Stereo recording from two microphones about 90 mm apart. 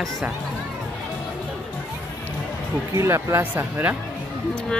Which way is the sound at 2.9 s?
30° right (ahead or behind).